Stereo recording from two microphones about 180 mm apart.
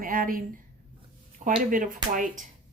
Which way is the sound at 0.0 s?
50° right (ahead or behind).